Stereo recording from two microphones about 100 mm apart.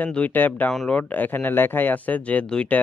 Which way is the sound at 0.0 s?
15° left (ahead or behind).